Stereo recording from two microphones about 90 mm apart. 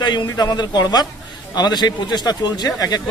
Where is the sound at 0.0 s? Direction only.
55° left (ahead or behind).